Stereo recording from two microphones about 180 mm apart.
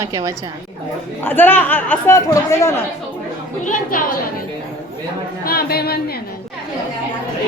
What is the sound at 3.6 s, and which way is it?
Speech, 50° left (ahead or behind).